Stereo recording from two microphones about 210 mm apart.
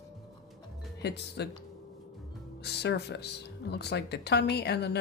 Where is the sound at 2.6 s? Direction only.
50° left (ahead or behind).